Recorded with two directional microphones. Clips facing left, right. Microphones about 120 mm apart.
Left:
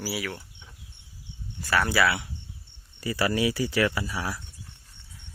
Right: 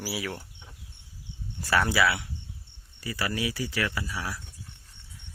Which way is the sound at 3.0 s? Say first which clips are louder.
Left 6 dB; 30° left (ahead or behind).